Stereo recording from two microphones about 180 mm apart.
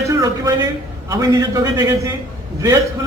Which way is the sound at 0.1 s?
20° right (ahead or behind).